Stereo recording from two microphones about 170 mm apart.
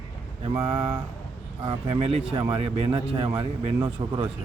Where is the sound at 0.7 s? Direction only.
30° right (ahead or behind).